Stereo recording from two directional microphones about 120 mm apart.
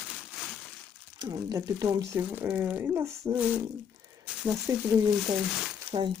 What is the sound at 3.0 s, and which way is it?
Speech, 25° right (ahead or behind).